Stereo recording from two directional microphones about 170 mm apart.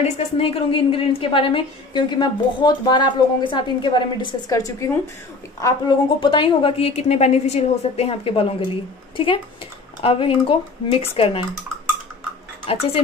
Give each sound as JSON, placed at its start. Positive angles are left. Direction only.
{"t": 0.4, "sound": "a woman's voice", "side_deg": 35}
{"t": 6.1, "sound": "a woman's voice", "side_deg": 30}
{"t": 12.6, "sound": "a woman's voice", "side_deg": 35}